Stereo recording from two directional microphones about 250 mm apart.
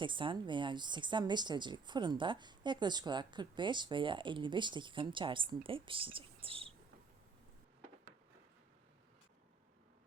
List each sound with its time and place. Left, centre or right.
0.0 s speech: centre